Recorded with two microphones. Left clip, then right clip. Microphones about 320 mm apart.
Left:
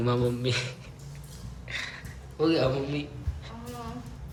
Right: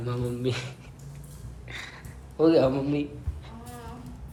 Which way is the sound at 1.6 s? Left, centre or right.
Centre.